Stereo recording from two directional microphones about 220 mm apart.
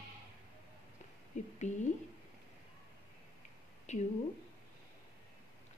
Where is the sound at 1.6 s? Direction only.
35° left (ahead or behind).